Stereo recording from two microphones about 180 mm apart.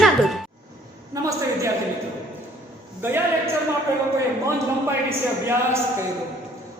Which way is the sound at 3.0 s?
15° right (ahead or behind).